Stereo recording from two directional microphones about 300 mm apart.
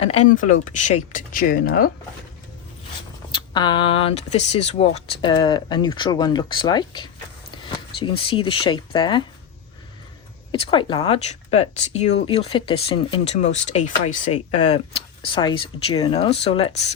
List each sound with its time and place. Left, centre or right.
0.0 s speech: left
3.3 s speech: centre
10.5 s speech: centre